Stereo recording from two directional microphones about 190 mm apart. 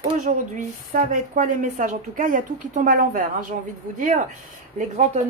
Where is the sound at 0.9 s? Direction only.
40° right (ahead or behind).